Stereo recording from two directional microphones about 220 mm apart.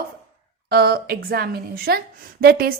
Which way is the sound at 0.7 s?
45° right (ahead or behind).